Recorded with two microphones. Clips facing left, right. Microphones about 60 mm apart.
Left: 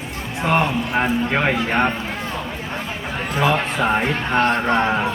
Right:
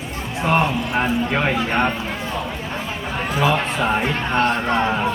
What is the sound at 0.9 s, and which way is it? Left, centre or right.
Speech, left.